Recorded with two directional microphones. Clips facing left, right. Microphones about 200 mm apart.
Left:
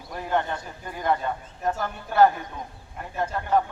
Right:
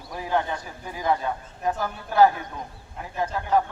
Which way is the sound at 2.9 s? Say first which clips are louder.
Even; centre (ahead or behind).